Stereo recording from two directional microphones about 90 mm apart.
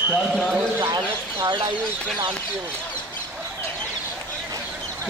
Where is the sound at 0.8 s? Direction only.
55° right (ahead or behind).